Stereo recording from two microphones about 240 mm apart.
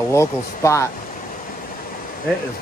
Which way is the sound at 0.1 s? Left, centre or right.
Centre.